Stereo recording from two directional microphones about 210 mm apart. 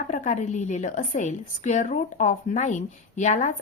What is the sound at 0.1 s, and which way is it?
A woman's voice, 35° left (ahead or behind).